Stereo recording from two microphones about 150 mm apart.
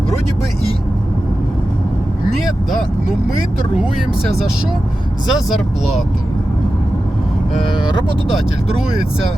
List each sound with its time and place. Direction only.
2.4 s speech: centre (ahead or behind)
5.3 s speech: centre (ahead or behind)
7.7 s speech: 30° left (ahead or behind)